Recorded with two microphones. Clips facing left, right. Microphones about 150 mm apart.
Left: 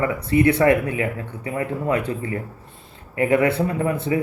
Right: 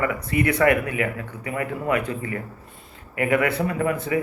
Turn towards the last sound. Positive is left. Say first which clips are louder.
# left 1 dB
turn(degrees=30)  # may be behind; listen again after turning